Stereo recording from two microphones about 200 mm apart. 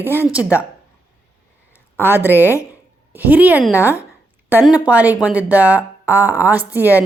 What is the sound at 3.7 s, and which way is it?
Speech, 15° left (ahead or behind).